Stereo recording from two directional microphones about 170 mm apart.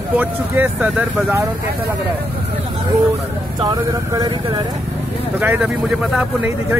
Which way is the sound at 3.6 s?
25° right (ahead or behind).